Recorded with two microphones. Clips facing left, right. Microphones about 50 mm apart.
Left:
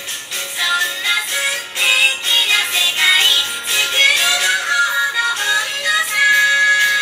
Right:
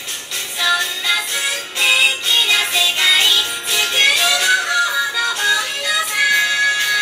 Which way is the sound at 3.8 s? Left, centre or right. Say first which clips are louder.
Left 1 dB; centre.